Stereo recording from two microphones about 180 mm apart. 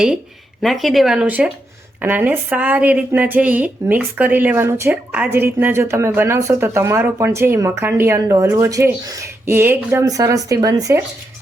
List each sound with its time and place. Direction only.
0.6 s speech: centre (ahead or behind); by 11.0 s 20° right (ahead or behind)